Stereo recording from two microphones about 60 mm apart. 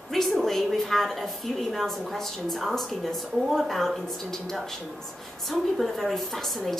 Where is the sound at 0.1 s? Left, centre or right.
Centre.